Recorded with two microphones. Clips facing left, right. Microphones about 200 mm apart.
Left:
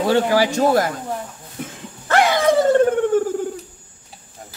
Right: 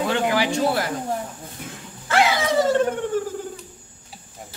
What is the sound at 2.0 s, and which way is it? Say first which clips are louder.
Dog: left 4 dB; 50° left (ahead or behind).